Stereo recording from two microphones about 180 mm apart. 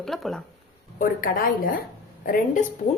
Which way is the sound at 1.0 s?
50° left (ahead or behind).